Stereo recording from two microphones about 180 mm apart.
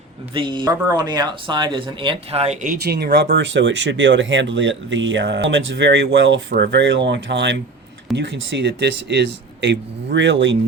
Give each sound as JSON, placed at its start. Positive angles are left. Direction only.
{"t": 0.3, "sound": "speech", "side_deg": -25}
{"t": 2.8, "sound": "speech", "side_deg": -65}
{"t": 6.5, "sound": "speech", "side_deg": -70}